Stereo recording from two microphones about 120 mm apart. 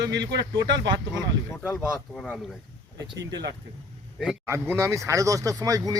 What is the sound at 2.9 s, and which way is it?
Speech, 30° right (ahead or behind).